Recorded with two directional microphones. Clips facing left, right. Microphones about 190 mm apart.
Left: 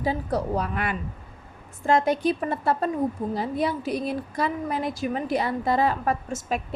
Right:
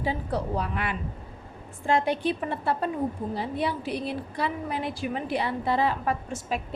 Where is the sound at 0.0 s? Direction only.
40° left (ahead or behind).